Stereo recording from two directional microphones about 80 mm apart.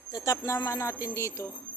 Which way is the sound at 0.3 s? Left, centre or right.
Left.